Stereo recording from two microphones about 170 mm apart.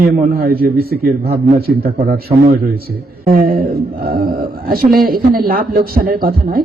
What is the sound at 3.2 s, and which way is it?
Speech, 60° right (ahead or behind).